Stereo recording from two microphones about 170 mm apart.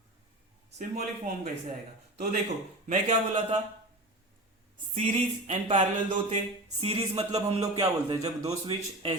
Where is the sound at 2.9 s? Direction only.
45° right (ahead or behind).